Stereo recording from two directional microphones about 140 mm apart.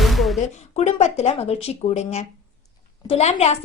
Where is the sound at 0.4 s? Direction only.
55° left (ahead or behind).